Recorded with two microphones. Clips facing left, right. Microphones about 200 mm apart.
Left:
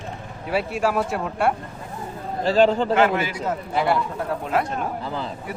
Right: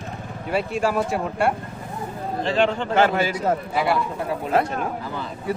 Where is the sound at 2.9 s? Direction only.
30° right (ahead or behind).